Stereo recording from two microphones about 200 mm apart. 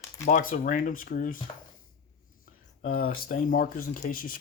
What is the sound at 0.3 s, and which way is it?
Speech, 40° left (ahead or behind).